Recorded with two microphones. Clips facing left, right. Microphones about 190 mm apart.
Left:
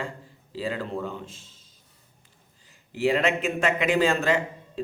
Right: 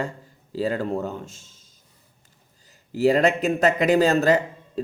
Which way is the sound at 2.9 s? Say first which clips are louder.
Right 5 dB; 40° right (ahead or behind).